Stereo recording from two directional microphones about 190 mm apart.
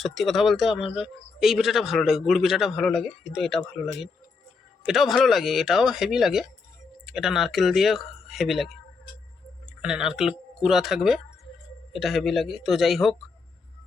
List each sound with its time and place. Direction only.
0.0 s a man's voice: centre (ahead or behind)
4.9 s a man's voice: centre (ahead or behind)